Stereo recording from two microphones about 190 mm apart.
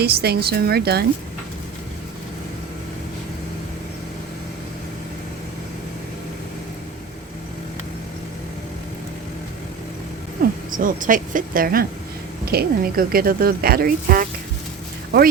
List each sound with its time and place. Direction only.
0.0 s speech: 55° right (ahead or behind)
10.4 s a sound: 50° right (ahead or behind)
10.8 s speech: 45° right (ahead or behind)